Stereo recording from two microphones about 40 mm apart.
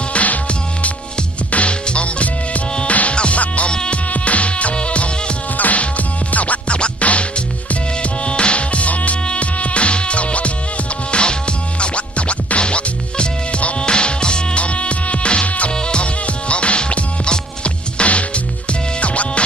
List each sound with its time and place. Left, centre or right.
0.1 s music: left
4.1 s music: left